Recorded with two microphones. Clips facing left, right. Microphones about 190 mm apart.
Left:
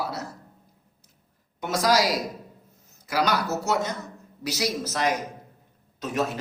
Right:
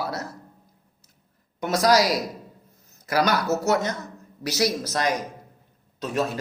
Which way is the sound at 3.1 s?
45° right (ahead or behind).